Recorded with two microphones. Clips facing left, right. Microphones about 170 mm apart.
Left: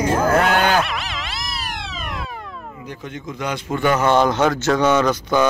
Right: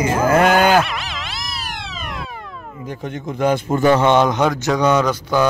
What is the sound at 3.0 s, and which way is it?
Speech, 55° right (ahead or behind).